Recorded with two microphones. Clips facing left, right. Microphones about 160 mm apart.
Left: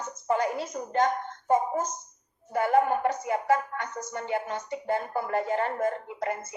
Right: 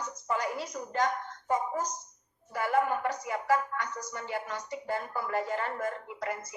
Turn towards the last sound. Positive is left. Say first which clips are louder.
# left 4 dB
turn(degrees=25)  # may be behind; listen again after turning